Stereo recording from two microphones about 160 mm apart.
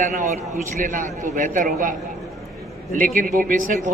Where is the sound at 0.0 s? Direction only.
50° right (ahead or behind).